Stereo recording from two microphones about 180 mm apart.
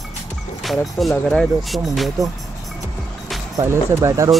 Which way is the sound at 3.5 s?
15° right (ahead or behind).